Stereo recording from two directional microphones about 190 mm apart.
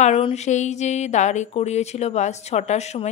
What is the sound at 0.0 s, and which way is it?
Speech, 35° left (ahead or behind).